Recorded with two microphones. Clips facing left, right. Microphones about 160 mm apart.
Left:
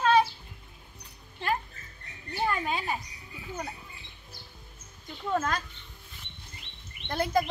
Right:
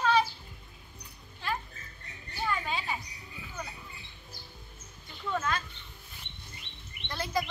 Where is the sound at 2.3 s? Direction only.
50° left (ahead or behind).